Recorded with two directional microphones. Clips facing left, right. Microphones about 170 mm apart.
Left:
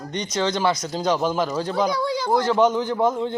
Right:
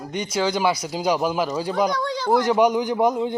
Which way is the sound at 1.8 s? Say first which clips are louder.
Left 1 dB; 5° left (ahead or behind).